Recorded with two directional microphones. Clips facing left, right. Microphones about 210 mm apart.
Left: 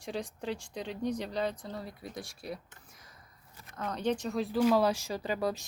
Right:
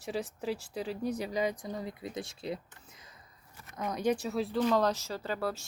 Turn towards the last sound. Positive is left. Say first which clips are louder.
# left 2 dB
turn(degrees=15)  # may be behind; listen again after turning